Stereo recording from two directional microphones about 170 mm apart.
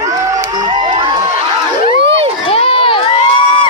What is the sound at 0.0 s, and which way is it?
Crowd, 20° right (ahead or behind).